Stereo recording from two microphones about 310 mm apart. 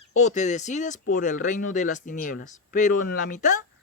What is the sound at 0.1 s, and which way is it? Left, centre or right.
Speech, left.